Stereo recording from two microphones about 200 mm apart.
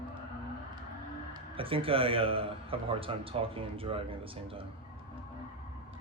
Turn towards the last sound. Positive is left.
turn(degrees=-25)  # may be behind; listen again after turning